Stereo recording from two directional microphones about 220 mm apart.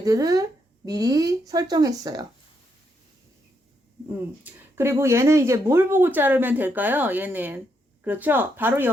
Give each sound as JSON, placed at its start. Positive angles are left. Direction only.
{"t": 0.0, "sound": "speech", "side_deg": -15}
{"t": 4.4, "sound": "speech", "side_deg": -10}